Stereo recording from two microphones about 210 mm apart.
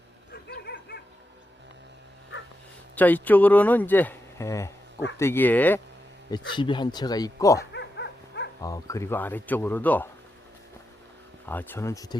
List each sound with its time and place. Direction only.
0.4 s bow-wow: 50° left (ahead or behind)
2.9 s speech: 10° left (ahead or behind)
6.3 s speech: 20° left (ahead or behind)
7.6 s dog: 55° left (ahead or behind)
8.6 s speech: 15° left (ahead or behind)
11.4 s speech: 10° left (ahead or behind)